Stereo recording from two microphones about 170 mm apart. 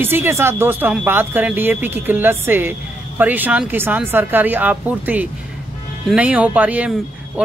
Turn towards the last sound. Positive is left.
turn(degrees=-5)  # may be behind; listen again after turning